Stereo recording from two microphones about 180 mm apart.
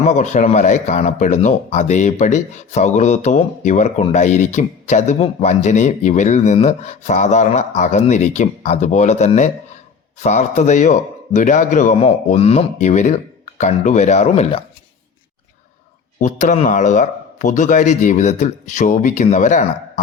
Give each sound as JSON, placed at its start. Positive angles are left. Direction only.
{"t": 0.0, "sound": "speech", "side_deg": 40}
{"t": 16.1, "sound": "a man's voice", "side_deg": 45}